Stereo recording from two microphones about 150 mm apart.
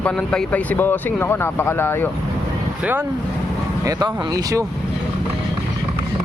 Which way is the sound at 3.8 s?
25° right (ahead or behind).